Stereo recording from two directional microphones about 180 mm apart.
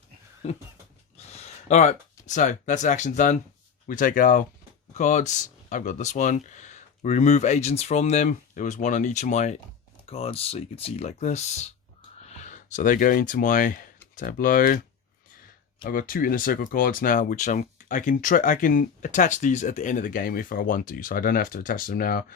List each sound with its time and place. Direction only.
0.4 s speech: 35° left (ahead or behind)
15.8 s speech: 55° left (ahead or behind)